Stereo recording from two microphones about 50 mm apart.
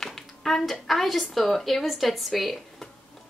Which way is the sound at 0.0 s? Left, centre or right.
Centre.